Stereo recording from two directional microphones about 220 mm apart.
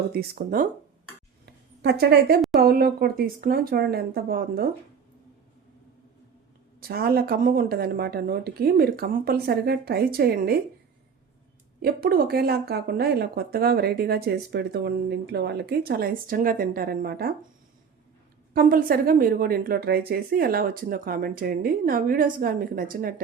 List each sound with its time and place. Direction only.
0.1 s a woman's voice: 40° right (ahead or behind)
1.5 s a sound: 50° right (ahead or behind)
2.6 s speech: 45° right (ahead or behind)
6.7 s speech: 45° right (ahead or behind)
11.8 s speech: 45° right (ahead or behind)
18.5 s a woman's voice: 40° right (ahead or behind)